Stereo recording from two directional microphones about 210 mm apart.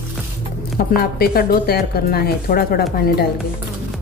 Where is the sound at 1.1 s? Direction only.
45° left (ahead or behind).